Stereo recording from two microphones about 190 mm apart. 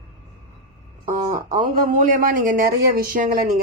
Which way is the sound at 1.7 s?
45° right (ahead or behind).